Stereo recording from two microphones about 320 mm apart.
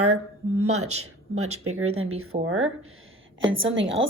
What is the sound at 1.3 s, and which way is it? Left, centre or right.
A woman's voice, right.